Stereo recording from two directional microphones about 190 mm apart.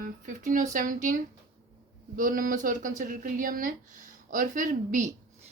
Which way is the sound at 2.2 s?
45° right (ahead or behind).